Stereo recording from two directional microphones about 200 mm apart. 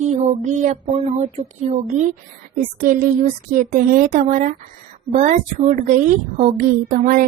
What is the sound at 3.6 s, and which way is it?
A woman's voice, 40° right (ahead or behind).